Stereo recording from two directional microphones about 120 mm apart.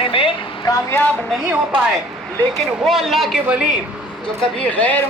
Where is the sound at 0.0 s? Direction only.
50° left (ahead or behind).